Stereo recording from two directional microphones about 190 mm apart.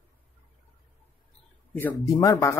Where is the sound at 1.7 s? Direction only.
15° left (ahead or behind).